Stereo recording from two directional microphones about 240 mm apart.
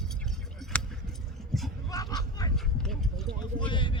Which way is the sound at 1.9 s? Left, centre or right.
Centre.